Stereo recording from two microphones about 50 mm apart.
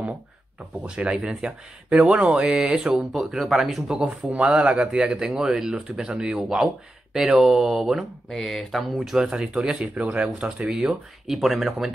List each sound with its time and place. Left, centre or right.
0.8 s speech: centre
3.1 s speech: centre
4.0 s speech: right; by 9.1 s centre
9.1 s speech: centre
11.2 s speech: centre